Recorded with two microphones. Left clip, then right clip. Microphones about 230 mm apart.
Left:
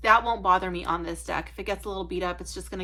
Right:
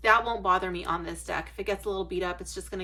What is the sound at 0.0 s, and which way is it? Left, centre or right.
Speech, left.